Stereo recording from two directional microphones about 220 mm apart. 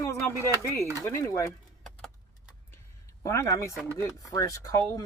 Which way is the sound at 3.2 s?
15° left (ahead or behind).